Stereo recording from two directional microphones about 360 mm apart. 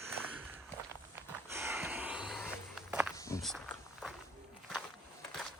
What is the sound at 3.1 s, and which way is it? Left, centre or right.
Walk, centre.